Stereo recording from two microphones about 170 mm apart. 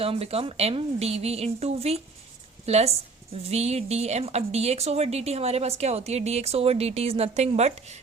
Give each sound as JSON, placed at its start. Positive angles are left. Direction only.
{"t": 0.0, "sound": "a woman's voice", "side_deg": -35}